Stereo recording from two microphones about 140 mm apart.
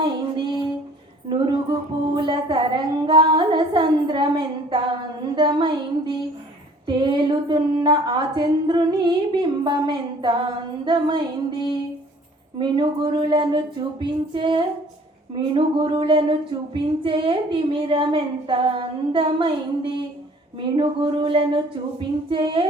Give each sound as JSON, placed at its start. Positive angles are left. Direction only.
{"t": 0.0, "sound": "music", "side_deg": -35}
{"t": 1.3, "sound": "a woman's voice", "side_deg": -35}